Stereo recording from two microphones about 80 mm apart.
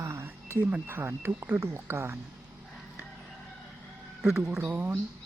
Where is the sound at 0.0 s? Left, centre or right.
Right.